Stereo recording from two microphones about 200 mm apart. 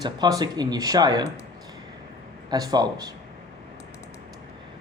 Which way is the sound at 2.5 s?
20° right (ahead or behind).